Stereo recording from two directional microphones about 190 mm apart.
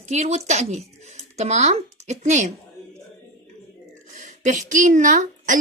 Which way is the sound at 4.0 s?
40° right (ahead or behind).